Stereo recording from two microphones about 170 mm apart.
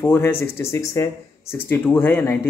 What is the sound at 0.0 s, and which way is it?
Speech, 15° left (ahead or behind).